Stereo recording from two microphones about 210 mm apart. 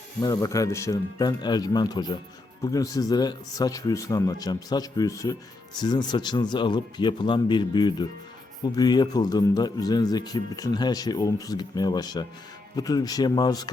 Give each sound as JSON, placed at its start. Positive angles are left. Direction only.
{"t": 0.2, "sound": "speech", "side_deg": 15}